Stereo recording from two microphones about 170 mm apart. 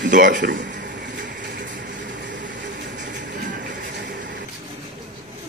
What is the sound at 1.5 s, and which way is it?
Vehicle, 50° right (ahead or behind).